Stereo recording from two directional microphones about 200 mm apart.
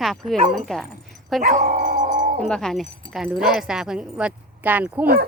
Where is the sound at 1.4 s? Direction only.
40° right (ahead or behind).